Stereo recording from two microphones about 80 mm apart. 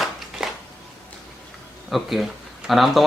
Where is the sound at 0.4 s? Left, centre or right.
Centre.